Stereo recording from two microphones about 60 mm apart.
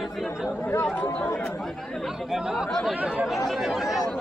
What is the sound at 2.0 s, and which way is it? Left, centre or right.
A man's voice, centre.